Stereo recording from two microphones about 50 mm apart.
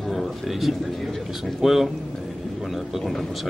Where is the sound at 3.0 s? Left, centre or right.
Centre.